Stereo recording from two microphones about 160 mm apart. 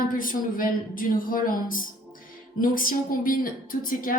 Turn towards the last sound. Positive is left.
turn(degrees=60)  # may be behind; listen again after turning